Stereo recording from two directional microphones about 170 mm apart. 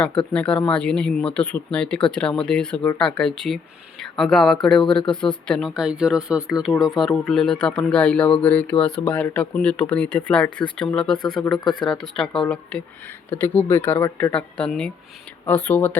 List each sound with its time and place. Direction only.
0.2 s speech: 5° left (ahead or behind)
11.6 s speech: 25° left (ahead or behind)
12.1 s speech: 5° left (ahead or behind)